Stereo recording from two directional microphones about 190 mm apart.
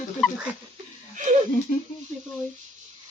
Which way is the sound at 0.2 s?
Centre (ahead or behind).